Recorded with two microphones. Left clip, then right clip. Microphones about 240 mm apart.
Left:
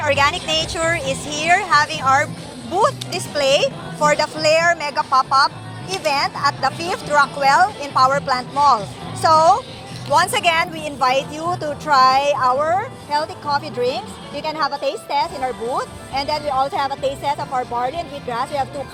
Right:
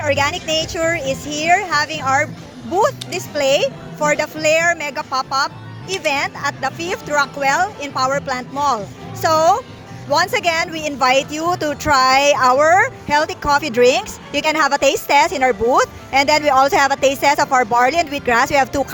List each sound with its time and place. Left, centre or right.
0.0 s speech: right
13.5 s speech: right
15.4 s speech: right
16.1 s speech: right
17.3 s speech: right
17.9 s speech: right